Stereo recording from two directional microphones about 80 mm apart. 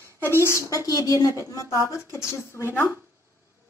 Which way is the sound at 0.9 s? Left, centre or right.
Left.